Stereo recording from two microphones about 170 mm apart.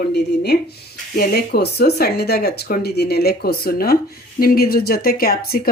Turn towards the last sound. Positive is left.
turn(degrees=65)  # may be behind; listen again after turning